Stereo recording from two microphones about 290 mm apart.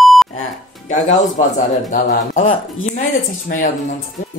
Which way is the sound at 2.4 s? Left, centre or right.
Left.